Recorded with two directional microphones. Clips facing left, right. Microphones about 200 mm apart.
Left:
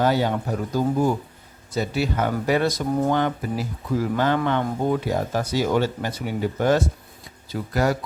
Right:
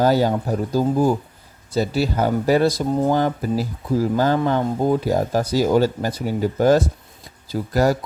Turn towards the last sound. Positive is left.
turn(degrees=-40)  # may be behind; listen again after turning